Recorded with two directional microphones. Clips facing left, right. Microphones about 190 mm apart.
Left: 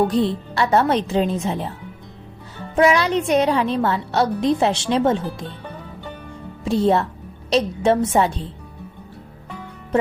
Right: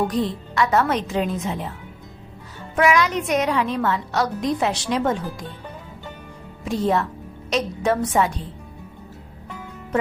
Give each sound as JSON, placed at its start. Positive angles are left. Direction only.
{"t": 0.0, "sound": "a woman's voice", "side_deg": 30}
{"t": 2.7, "sound": "a woman's voice", "side_deg": 30}
{"t": 6.7, "sound": "a woman's voice", "side_deg": 30}